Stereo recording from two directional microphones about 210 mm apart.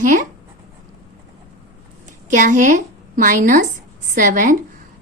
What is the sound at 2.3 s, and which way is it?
A woman's voice, 40° right (ahead or behind).